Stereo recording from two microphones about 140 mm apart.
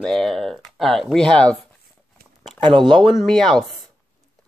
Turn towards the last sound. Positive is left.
turn(degrees=5)  # may be behind; listen again after turning